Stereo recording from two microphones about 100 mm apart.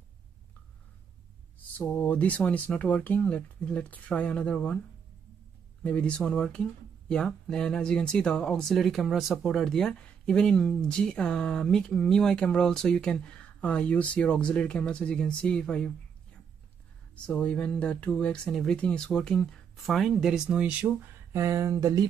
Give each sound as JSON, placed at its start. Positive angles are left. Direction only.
{"t": 1.8, "sound": "speech", "side_deg": 15}
{"t": 5.9, "sound": "speech", "side_deg": 10}
{"t": 17.1, "sound": "speech", "side_deg": 10}
{"t": 18.8, "sound": "speech", "side_deg": 10}
{"t": 20.8, "sound": "speech", "side_deg": -25}